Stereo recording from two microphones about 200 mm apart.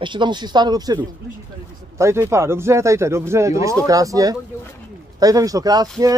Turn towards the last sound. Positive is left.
turn(degrees=-20)  # may be behind; listen again after turning